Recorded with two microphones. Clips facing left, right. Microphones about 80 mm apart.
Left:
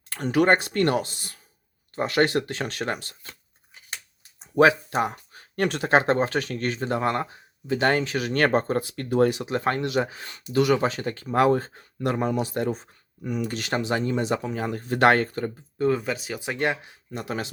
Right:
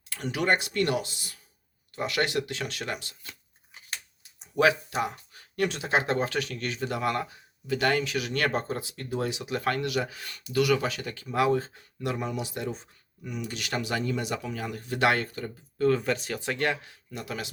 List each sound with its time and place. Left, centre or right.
0.1 s speech: left
4.2 s a sound: left
4.9 s speech: left
9.5 s speech: left
16.0 s speech: centre
16.6 s speech: left